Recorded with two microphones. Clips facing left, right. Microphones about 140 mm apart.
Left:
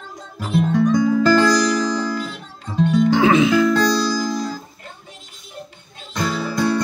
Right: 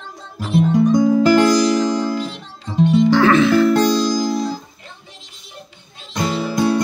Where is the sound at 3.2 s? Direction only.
15° left (ahead or behind).